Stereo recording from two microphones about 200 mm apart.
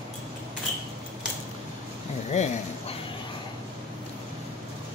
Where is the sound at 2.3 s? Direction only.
35° left (ahead or behind).